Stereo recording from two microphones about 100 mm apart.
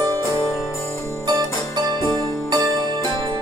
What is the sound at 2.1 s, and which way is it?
Music, 40° right (ahead or behind).